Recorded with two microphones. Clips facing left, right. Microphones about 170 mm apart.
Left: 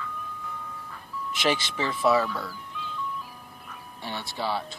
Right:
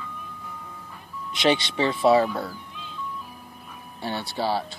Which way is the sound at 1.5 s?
25° right (ahead or behind).